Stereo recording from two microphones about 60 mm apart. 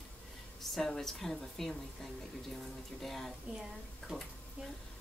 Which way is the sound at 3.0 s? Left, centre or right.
Centre.